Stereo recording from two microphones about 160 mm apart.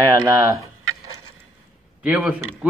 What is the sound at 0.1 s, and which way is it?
Speech, 20° right (ahead or behind).